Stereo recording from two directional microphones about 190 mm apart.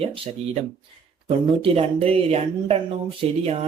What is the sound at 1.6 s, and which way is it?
Speech, 30° right (ahead or behind).